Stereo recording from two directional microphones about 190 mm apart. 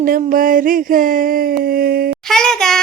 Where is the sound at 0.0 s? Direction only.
45° right (ahead or behind).